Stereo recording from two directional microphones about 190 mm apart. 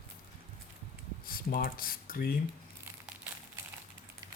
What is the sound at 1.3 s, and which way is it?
Speech, 50° left (ahead or behind).